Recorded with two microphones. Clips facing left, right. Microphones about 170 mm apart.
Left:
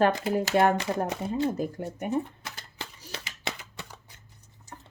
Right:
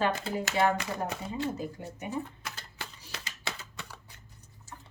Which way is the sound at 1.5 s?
50° left (ahead or behind).